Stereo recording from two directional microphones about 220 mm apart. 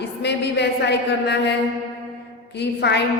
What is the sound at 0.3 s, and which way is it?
Speech, 50° left (ahead or behind).